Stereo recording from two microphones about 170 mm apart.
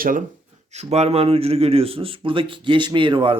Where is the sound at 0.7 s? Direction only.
40° right (ahead or behind).